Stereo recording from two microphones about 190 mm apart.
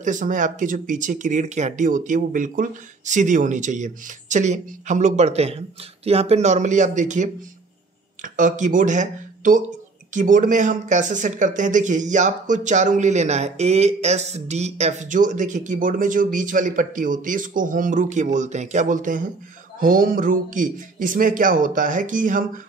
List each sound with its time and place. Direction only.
0.0 s speech: 40° right (ahead or behind)